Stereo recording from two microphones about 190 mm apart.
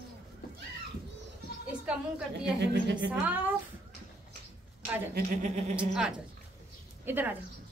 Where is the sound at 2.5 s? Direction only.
60° right (ahead or behind).